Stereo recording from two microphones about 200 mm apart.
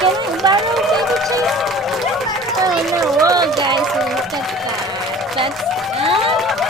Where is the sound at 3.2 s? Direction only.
15° right (ahead or behind).